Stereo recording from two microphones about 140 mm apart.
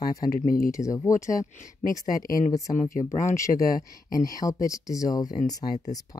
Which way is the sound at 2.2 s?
85° left.